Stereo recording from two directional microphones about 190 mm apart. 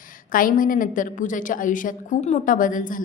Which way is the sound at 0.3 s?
45° left (ahead or behind).